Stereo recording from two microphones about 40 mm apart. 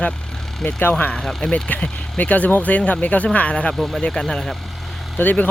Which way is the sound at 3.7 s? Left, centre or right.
Centre.